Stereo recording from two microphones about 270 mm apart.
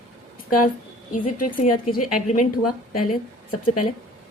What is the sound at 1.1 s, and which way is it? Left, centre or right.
Speech, left.